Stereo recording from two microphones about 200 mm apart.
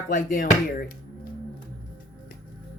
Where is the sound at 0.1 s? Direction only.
40° left (ahead or behind).